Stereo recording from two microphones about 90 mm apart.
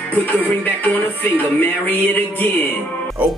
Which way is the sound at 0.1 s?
20° left (ahead or behind).